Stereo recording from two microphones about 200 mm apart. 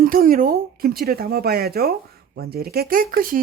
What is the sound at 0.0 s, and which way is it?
Speech, 45° right (ahead or behind).